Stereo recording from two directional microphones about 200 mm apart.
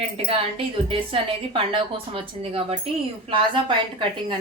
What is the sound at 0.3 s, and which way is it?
A woman's voice, 25° right (ahead or behind).